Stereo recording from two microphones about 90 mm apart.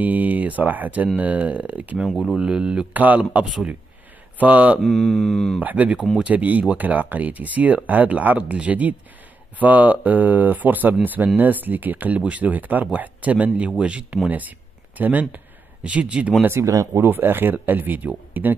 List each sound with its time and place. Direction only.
0.0 s speech: 20° right (ahead or behind)
2.0 s mantra: 5° left (ahead or behind)
2.3 s speech: 10° right (ahead or behind)
4.8 s mantra: centre (ahead or behind)
5.6 s speech: 15° right (ahead or behind)
16.4 s speech: 30° right (ahead or behind)